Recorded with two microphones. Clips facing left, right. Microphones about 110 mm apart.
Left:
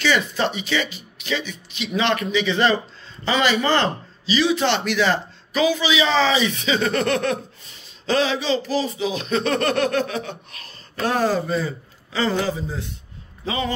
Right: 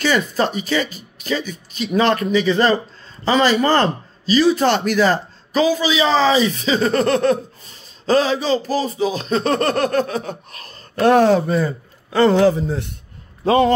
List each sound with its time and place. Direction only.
0.0 s speech: 40° right (ahead or behind)
11.0 s a man's voice: 65° right (ahead or behind)